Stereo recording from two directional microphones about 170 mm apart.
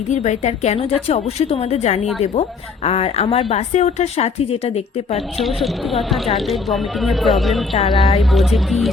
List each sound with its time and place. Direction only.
0.1 s a woman's voice: 45° left (ahead or behind)
5.4 s speech: centre (ahead or behind)
7.9 s a woman's voice: 35° left (ahead or behind)
8.2 s speech: centre (ahead or behind)